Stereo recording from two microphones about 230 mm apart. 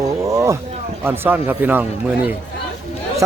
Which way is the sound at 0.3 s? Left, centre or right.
Centre.